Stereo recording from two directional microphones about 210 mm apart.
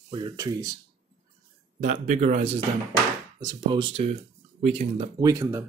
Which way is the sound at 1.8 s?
35° right (ahead or behind).